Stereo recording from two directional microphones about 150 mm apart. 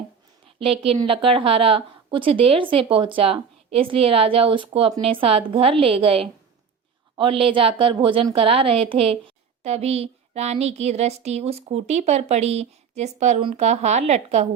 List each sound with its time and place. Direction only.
0.6 s a woman's voice: 40° right (ahead or behind)